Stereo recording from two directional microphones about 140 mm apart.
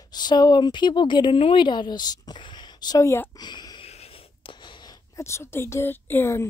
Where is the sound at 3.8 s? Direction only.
45° left (ahead or behind).